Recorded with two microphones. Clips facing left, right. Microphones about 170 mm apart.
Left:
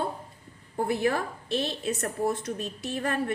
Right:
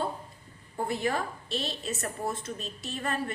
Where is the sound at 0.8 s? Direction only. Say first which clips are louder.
Left 3 dB; 60° left (ahead or behind).